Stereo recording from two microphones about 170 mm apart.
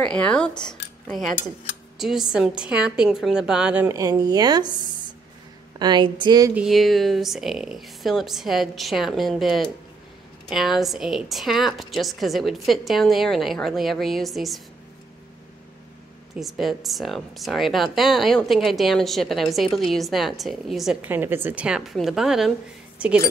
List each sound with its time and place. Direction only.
0.0 s speech: 5° left (ahead or behind)
0.7 s a sound: 5° left (ahead or behind)
2.0 s a woman's voice: 5° right (ahead or behind); by 6.5 s 25° right (ahead or behind)
6.5 s speech: centre (ahead or behind)
16.3 s a woman's voice: centre (ahead or behind)